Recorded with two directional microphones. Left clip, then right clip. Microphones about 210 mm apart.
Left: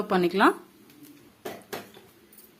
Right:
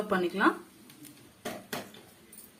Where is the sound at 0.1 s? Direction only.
50° left (ahead or behind).